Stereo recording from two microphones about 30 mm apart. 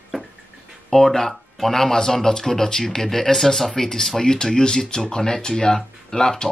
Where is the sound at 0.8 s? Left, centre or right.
Centre.